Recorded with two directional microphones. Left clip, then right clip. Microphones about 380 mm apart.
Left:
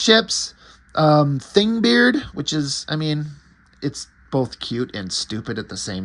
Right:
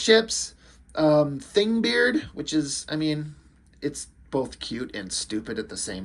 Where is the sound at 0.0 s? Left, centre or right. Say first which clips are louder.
Left 4 dB; centre.